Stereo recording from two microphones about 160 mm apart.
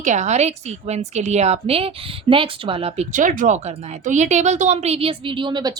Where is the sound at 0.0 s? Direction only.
50° right (ahead or behind).